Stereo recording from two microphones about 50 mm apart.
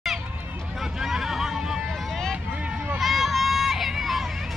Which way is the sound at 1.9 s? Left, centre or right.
Centre.